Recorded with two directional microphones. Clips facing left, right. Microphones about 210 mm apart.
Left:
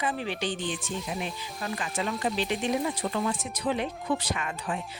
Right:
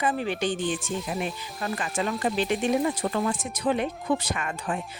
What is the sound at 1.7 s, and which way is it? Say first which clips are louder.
Speech: right 3 dB; 50° right (ahead or behind).